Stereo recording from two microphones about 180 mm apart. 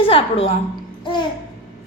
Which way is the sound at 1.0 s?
25° left (ahead or behind).